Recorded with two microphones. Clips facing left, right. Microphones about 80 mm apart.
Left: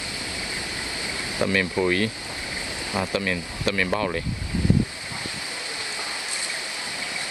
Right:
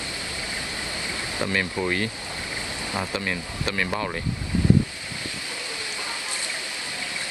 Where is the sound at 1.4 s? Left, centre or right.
Centre.